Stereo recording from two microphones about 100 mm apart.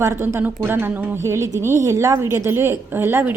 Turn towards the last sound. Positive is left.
turn(degrees=-20)  # may be behind; listen again after turning